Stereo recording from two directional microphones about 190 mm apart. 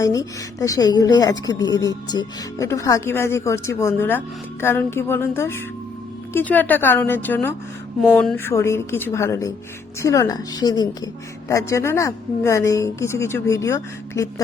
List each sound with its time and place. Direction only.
0.0 s a woman's voice: 15° left (ahead or behind)